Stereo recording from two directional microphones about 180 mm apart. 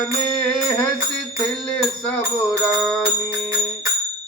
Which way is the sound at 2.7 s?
Centre (ahead or behind).